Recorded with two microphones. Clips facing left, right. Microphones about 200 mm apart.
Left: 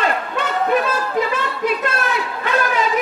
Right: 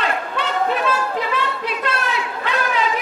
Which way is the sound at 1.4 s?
45° left (ahead or behind).